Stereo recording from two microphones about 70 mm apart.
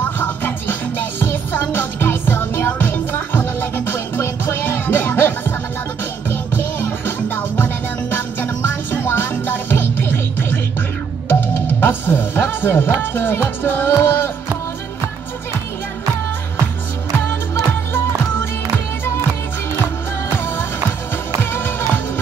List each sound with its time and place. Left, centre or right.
0.2 s music: left
6.5 s music: left
13.0 s speech: left
21.4 s music: left